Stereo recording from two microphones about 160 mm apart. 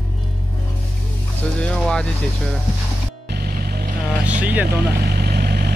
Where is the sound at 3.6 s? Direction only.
75° right (ahead or behind).